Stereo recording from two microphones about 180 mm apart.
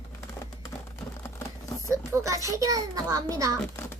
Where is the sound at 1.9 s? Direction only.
15° right (ahead or behind).